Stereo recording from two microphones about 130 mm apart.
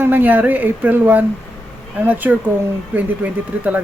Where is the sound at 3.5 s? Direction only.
10° right (ahead or behind).